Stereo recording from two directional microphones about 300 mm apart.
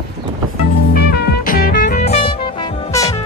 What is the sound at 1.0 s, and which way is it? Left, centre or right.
Music, left.